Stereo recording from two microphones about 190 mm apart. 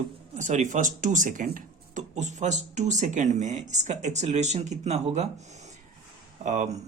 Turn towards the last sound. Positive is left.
turn(degrees=-40)  # may be behind; listen again after turning